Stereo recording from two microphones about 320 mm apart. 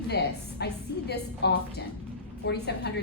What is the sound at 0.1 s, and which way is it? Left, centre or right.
A woman's voice, left.